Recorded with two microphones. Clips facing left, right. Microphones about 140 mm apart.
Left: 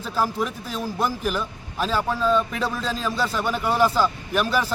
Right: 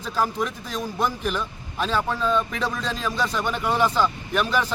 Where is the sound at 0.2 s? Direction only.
5° left (ahead or behind).